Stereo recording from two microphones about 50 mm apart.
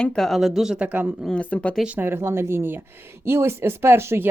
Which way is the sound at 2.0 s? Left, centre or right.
Right.